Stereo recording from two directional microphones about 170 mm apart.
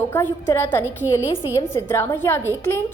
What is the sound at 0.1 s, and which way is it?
A woman's voice, 10° left (ahead or behind).